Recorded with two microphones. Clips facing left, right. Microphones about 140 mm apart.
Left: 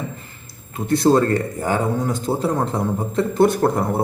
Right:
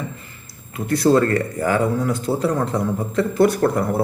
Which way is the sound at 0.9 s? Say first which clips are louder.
Even; 25° left (ahead or behind).